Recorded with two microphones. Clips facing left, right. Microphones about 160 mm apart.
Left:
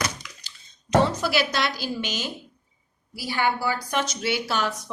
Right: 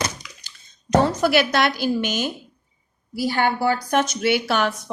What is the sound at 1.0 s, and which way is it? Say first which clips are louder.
A woman's voice: right 4 dB; 45° right (ahead or behind).